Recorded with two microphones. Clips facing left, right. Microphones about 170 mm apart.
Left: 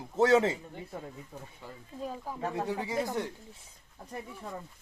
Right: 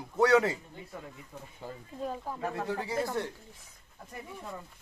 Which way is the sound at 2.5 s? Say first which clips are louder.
Left 2 dB; 20° left (ahead or behind).